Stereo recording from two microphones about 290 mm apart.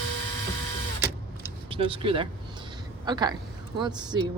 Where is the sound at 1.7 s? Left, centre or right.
Centre.